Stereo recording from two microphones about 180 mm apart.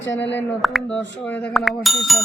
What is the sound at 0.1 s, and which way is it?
Speech, 80° left.